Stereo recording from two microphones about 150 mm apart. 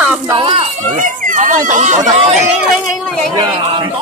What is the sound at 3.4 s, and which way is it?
Speech, 30° right (ahead or behind).